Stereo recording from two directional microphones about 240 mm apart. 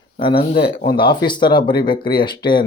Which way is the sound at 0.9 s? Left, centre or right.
Centre.